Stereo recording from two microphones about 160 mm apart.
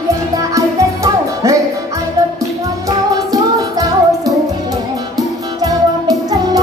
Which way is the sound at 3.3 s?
20° right (ahead or behind).